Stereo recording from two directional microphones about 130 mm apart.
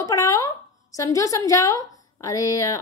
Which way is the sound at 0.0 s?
25° left (ahead or behind).